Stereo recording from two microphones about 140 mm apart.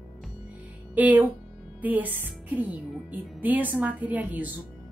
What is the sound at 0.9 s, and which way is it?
Speech, 10° right (ahead or behind).